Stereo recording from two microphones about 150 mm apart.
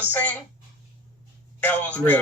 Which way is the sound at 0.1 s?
10° left (ahead or behind).